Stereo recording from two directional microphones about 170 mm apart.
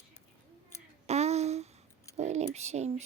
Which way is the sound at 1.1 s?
40° right (ahead or behind).